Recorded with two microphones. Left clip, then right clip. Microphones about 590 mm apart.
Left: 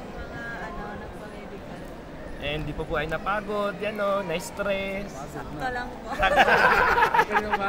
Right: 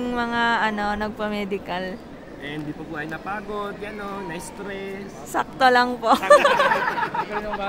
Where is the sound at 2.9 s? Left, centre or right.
Centre.